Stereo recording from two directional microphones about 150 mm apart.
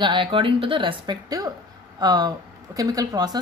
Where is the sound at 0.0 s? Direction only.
30° right (ahead or behind).